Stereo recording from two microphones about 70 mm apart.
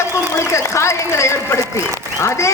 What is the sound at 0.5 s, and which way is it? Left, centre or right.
A woman's voice, left.